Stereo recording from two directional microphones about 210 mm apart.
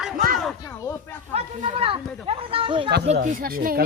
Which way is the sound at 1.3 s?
25° right (ahead or behind).